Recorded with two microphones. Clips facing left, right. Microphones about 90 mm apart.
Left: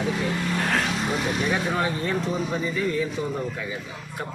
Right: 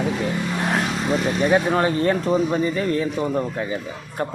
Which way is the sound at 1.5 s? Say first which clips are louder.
Right 9 dB; 45° right (ahead or behind).